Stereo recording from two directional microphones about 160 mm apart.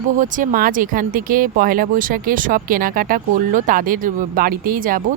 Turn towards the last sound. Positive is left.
turn(degrees=-60)  # may be behind; listen again after turning